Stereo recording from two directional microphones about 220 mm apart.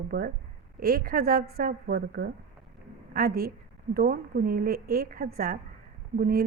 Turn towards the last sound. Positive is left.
turn(degrees=-40)  # may be behind; listen again after turning